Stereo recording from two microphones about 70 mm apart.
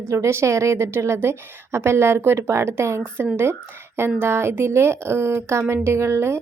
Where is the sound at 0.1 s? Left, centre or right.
Right.